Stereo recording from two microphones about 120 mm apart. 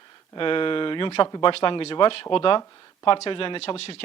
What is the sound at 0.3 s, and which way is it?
Speech, 45° left (ahead or behind).